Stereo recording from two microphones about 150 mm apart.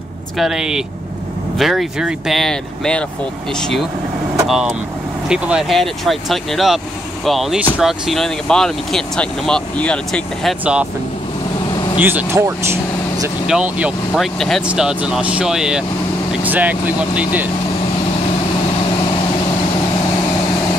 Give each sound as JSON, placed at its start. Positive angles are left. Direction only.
{"t": 0.4, "sound": "speech", "side_deg": -5}
{"t": 10.6, "sound": "speech", "side_deg": -10}
{"t": 12.0, "sound": "speech", "side_deg": -10}